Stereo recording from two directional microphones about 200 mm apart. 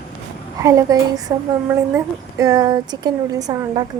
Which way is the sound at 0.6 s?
15° right (ahead or behind).